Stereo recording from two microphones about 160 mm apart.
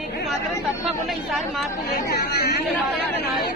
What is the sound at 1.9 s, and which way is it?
Speech, 75° left (ahead or behind).